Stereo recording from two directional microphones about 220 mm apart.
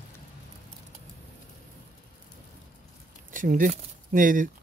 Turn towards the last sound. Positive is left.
turn(degrees=-35)  # may be behind; listen again after turning